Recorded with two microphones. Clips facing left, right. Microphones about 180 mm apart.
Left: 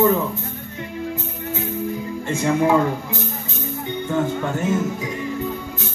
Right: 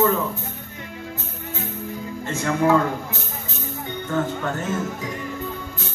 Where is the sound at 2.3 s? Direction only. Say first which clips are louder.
Left 1 dB; 15° left (ahead or behind).